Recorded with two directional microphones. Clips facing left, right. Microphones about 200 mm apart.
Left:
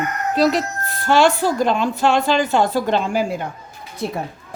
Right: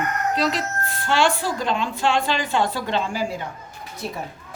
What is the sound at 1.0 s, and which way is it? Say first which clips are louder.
A woman's voice: left 6 dB; 40° left (ahead or behind).